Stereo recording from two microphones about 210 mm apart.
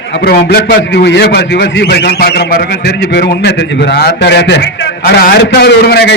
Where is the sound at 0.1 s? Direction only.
50° left (ahead or behind).